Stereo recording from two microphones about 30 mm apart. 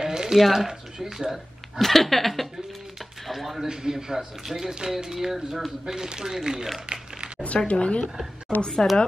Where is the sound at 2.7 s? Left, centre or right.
Centre.